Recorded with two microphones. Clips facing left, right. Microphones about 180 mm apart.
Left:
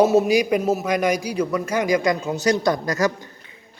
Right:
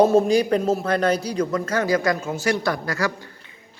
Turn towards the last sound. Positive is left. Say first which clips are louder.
# left 4 dB
turn(degrees=20)  # may be behind; listen again after turning